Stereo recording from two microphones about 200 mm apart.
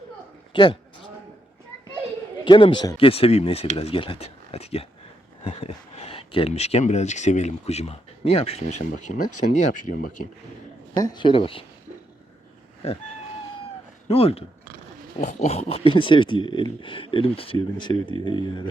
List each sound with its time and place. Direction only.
0.5 s a man's voice: 25° left (ahead or behind)
2.4 s speech: 25° left (ahead or behind); by 10.2 s 45° left (ahead or behind)
10.9 s speech: 20° left (ahead or behind)
14.1 s speech: 30° left (ahead or behind)